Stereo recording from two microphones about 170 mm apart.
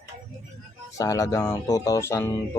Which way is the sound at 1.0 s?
20° left (ahead or behind).